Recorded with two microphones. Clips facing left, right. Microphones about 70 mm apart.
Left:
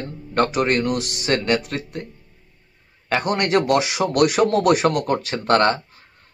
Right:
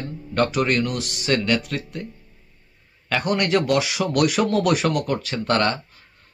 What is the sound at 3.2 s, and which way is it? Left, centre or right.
Speech, left.